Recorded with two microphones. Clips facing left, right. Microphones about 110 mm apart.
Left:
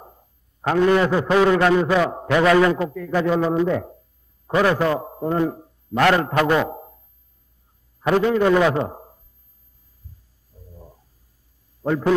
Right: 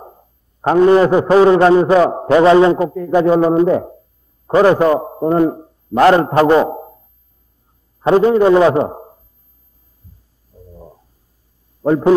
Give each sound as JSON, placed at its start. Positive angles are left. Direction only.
{"t": 0.0, "sound": "a man's voice", "side_deg": -30}
{"t": 8.0, "sound": "a man's voice", "side_deg": -30}
{"t": 10.5, "sound": "stomach rumble", "side_deg": -25}
{"t": 11.8, "sound": "a man's voice", "side_deg": -30}